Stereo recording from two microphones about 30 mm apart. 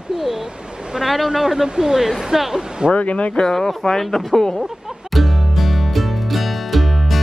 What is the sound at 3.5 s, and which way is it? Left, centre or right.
Speech, centre.